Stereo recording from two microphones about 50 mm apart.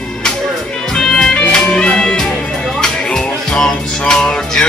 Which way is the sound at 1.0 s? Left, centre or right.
Centre.